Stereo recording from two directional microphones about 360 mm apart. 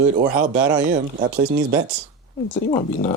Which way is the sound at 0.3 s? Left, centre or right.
Right.